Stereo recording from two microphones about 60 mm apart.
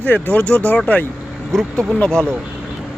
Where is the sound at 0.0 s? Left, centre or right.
Left.